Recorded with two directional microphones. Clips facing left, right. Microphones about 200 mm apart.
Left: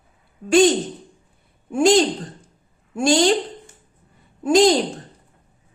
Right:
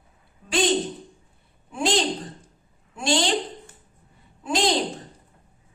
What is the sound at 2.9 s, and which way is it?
Speech, 45° left (ahead or behind).